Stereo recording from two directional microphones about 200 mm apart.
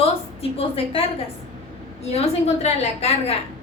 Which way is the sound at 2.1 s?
30° left (ahead or behind).